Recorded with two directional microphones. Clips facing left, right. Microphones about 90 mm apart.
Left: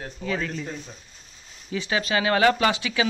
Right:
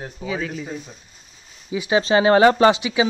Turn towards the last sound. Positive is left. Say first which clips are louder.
# right 5 dB
turn(degrees=-20)  # may be behind; listen again after turning